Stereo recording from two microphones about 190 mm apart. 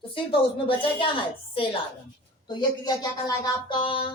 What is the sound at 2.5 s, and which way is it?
A woman's voice, 20° left (ahead or behind).